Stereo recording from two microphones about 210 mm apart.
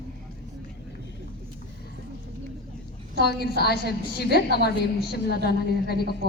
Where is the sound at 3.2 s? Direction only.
50° left (ahead or behind).